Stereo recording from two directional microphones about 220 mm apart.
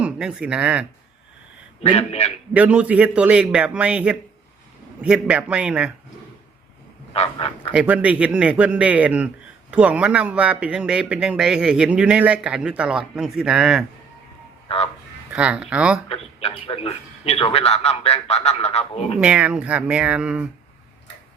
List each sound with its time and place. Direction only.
0.0 s speech: 5° right (ahead or behind)
1.8 s a man's voice: 30° left (ahead or behind)
2.5 s a man's voice: 5° right (ahead or behind)
7.1 s a man's voice: 25° left (ahead or behind)
7.7 s a man's voice: 5° right (ahead or behind)
14.7 s speech: 25° left (ahead or behind)
15.3 s a man's voice: 5° right (ahead or behind)
16.0 s a man's voice: 25° left (ahead or behind)
19.2 s a man's voice: 5° right (ahead or behind)